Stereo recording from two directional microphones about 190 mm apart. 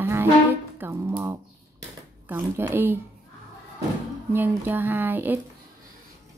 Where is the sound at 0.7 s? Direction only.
15° right (ahead or behind).